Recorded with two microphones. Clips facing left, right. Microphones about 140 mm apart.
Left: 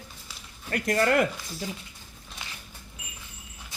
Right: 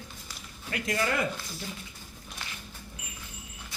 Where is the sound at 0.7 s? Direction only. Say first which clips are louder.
Left 6 dB; 50° left (ahead or behind).